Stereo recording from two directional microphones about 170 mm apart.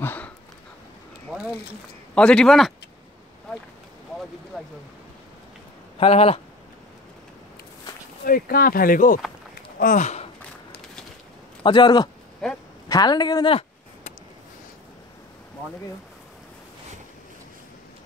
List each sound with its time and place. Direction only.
0.0 s dog: 10° left (ahead or behind)
2.1 s speech: 5° left (ahead or behind)
4.5 s speech: 5° right (ahead or behind)
5.9 s speech: 35° left (ahead or behind)
8.3 s speech: 60° left (ahead or behind)
11.6 s speech: 25° left (ahead or behind)
12.4 s speech: 5° left (ahead or behind)
12.8 s speech: 25° left (ahead or behind)